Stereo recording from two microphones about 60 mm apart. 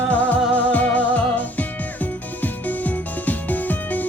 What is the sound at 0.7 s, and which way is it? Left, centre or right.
Music, left.